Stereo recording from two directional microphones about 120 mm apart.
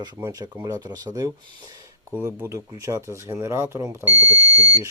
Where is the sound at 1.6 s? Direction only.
30° right (ahead or behind).